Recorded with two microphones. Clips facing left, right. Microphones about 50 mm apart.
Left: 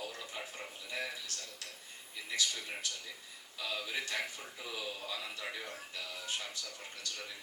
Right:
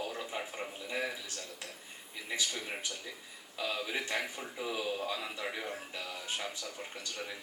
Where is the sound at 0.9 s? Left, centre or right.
Right.